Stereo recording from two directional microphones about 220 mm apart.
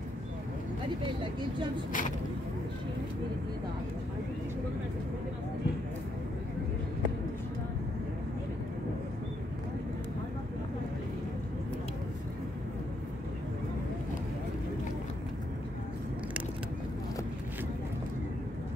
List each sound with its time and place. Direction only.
1.9 s speech: 35° left (ahead or behind)